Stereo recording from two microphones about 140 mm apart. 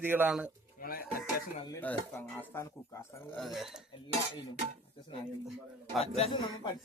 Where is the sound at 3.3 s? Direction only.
Centre (ahead or behind).